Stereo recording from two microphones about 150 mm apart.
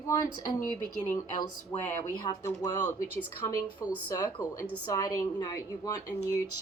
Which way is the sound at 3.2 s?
20° left (ahead or behind).